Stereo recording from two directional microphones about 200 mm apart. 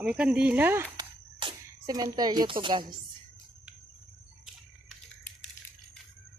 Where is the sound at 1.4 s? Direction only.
20° right (ahead or behind).